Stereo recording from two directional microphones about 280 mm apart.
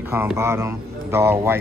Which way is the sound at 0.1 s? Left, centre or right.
Centre.